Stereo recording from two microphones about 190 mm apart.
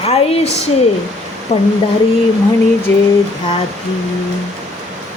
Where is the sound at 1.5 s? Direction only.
35° left (ahead or behind).